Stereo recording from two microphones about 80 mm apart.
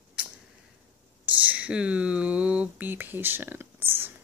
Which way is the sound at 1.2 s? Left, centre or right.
Centre.